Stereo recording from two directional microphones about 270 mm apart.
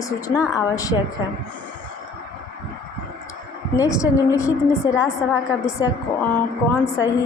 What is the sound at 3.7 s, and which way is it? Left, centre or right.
Speech, centre.